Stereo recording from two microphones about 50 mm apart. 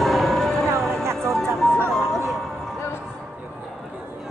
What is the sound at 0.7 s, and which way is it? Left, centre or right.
Music, right.